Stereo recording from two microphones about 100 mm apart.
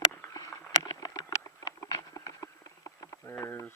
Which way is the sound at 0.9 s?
40° left (ahead or behind).